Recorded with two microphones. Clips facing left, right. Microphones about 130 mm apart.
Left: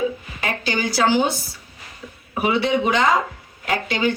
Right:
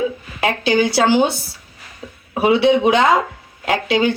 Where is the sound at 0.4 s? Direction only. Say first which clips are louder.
Right 8 dB; 70° right (ahead or behind).